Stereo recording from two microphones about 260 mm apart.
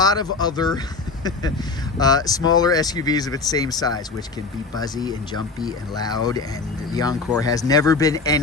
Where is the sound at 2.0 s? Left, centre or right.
Centre.